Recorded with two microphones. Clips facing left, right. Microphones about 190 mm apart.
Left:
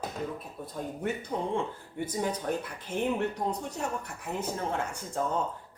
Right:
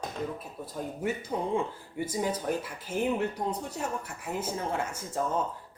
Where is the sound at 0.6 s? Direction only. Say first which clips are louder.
Right 1 dB; 5° right (ahead or behind).